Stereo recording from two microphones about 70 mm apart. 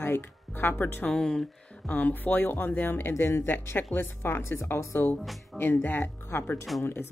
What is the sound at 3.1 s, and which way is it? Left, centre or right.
Speech, left.